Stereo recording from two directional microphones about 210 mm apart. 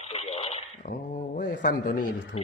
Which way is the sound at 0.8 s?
40° left (ahead or behind).